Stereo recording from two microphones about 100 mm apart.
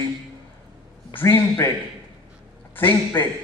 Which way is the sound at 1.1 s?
25° left (ahead or behind).